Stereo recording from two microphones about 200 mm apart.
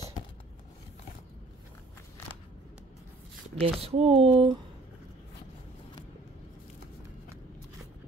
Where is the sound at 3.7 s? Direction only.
30° right (ahead or behind).